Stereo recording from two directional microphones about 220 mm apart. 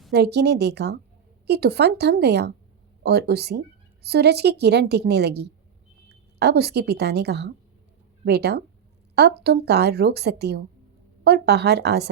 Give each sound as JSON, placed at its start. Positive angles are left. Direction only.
{"t": 0.1, "sound": "a woman's voice", "side_deg": -50}